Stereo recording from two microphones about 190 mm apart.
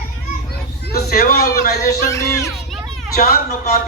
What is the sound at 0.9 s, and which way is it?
Speech, 55° left (ahead or behind).